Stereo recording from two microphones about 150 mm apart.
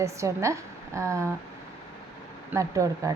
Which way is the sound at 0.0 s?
20° right (ahead or behind).